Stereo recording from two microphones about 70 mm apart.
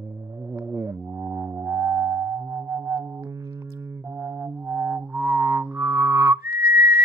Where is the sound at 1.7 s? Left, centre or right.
Right.